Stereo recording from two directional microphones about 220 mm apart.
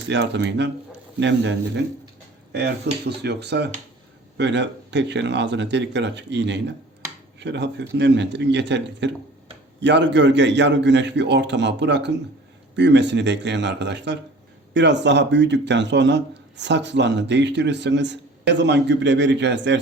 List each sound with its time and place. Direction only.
0.1 s a man's voice: 50° right (ahead or behind)